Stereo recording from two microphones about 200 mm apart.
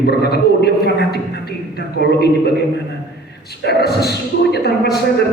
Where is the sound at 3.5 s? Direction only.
55° left (ahead or behind).